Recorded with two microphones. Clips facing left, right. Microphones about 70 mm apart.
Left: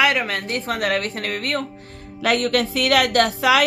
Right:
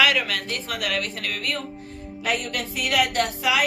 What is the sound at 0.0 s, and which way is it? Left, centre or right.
A woman's voice, left.